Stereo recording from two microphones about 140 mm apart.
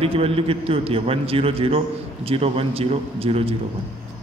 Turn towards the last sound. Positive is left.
turn(degrees=-45)  # may be behind; listen again after turning